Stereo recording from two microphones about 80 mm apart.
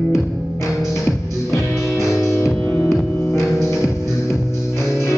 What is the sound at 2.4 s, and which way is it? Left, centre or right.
Music, left.